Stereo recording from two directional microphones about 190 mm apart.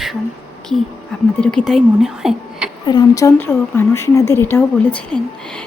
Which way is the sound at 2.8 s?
20° left (ahead or behind).